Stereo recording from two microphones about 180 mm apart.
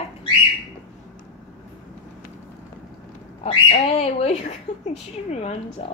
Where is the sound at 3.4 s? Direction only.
35° left (ahead or behind).